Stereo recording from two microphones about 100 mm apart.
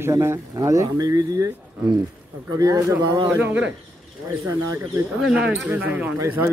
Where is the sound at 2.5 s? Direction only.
35° right (ahead or behind).